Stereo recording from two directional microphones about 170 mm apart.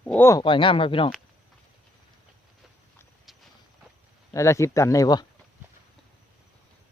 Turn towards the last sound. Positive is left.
turn(degrees=20)  # may be behind; listen again after turning